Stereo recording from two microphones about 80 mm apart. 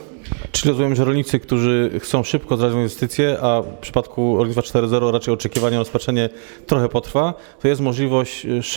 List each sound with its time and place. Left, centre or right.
0.5 s speech: centre